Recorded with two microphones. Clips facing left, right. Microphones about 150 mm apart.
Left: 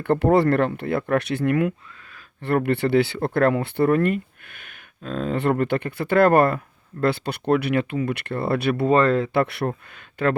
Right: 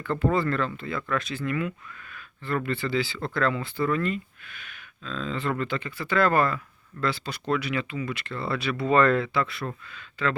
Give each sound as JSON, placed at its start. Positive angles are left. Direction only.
{"t": 0.0, "sound": "speech", "side_deg": 65}
{"t": 8.9, "sound": "speech", "side_deg": 35}
{"t": 9.3, "sound": "speech", "side_deg": 65}